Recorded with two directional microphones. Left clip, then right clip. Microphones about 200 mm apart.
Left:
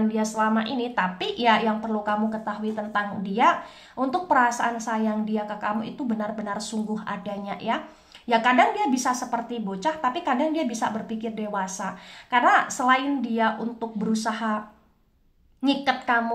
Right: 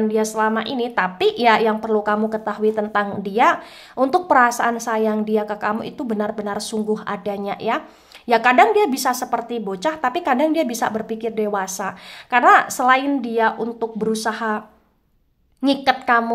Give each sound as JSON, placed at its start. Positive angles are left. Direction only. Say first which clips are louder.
{"t": 0.1, "sound": "a woman's voice", "louder": "right 5 dB", "side_deg": -35}
{"t": 15.6, "sound": "a woman's voice", "louder": "right 6 dB", "side_deg": -40}